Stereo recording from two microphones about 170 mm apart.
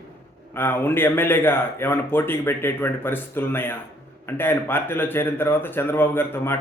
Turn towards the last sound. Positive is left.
turn(degrees=15)  # may be behind; listen again after turning